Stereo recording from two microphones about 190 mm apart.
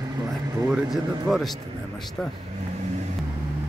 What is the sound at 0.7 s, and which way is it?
Speech, centre (ahead or behind).